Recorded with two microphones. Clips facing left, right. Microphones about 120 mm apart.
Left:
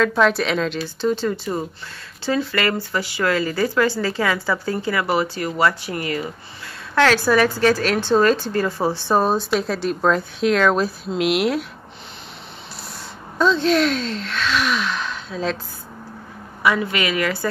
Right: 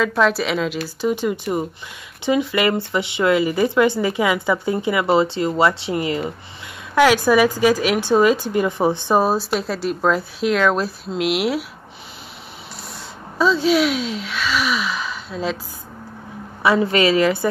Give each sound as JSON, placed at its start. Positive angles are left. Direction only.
{"t": 0.0, "sound": "a woman's voice", "side_deg": -5}
{"t": 13.4, "sound": "speech", "side_deg": -5}
{"t": 16.6, "sound": "speech", "side_deg": -30}